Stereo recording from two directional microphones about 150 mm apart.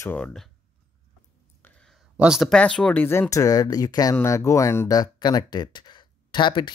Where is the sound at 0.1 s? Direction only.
5° left (ahead or behind).